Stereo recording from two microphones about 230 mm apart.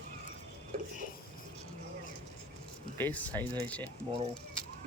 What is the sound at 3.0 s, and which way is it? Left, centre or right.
Speech, centre.